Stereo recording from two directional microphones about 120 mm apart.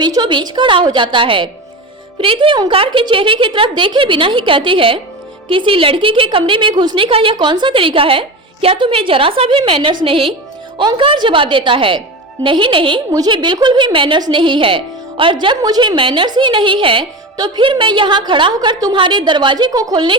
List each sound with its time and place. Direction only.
0.0 s a woman's voice: 40° right (ahead or behind)
13.1 s a woman's voice: 35° right (ahead or behind)